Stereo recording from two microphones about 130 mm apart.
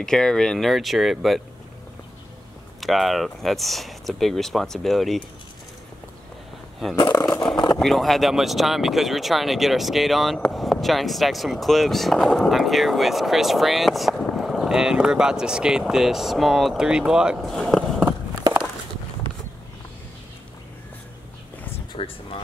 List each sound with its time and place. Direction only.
0.0 s speech: 5° left (ahead or behind)
2.8 s speech: centre (ahead or behind)
7.2 s vehicle: 30° left (ahead or behind)
7.7 s speech: centre (ahead or behind)
21.7 s a sound: 45° left (ahead or behind)